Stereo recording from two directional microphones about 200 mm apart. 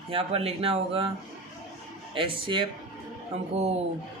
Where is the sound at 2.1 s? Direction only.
25° right (ahead or behind).